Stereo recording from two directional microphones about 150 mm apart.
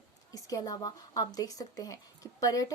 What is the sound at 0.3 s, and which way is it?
A woman's voice, 25° left (ahead or behind).